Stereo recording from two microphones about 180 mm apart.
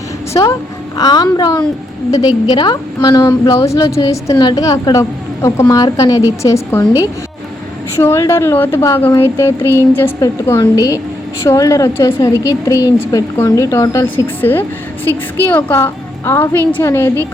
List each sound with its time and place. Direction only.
0.4 s a woman's voice: 25° left (ahead or behind)
7.9 s a woman's voice: 15° left (ahead or behind)